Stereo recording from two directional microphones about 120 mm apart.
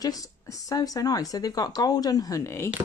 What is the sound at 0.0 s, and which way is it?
Speech, 30° left (ahead or behind).